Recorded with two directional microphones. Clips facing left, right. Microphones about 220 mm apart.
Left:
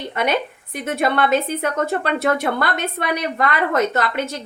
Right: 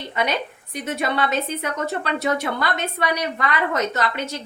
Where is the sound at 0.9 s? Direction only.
50° left (ahead or behind).